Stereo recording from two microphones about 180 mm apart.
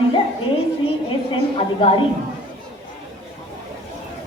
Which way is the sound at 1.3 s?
30° left (ahead or behind).